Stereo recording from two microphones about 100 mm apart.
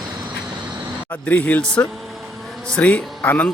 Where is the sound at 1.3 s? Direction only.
15° left (ahead or behind).